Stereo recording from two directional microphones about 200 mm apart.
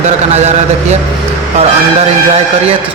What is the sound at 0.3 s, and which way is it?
Speech, 35° right (ahead or behind).